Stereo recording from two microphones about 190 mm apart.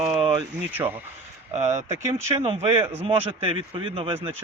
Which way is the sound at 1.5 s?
40° right (ahead or behind).